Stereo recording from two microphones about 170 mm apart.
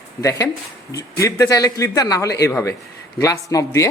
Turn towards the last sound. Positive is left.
turn(degrees=20)  # may be behind; listen again after turning